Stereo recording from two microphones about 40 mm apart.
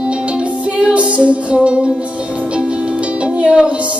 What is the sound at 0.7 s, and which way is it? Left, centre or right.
Music, right.